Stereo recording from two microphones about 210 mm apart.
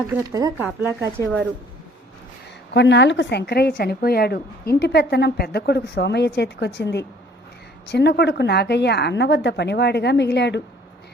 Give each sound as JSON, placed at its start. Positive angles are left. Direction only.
{"t": 0.3, "sound": "speech", "side_deg": -10}
{"t": 2.7, "sound": "a woman's voice", "side_deg": 55}